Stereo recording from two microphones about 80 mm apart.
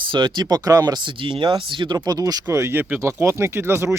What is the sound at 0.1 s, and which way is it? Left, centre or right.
Speech, right.